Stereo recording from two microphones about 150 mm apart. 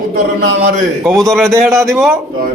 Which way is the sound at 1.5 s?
15° right (ahead or behind).